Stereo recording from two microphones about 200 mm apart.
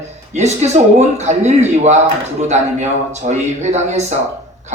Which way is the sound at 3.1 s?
35° right (ahead or behind).